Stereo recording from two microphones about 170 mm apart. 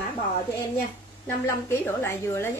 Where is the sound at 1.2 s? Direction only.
15° left (ahead or behind).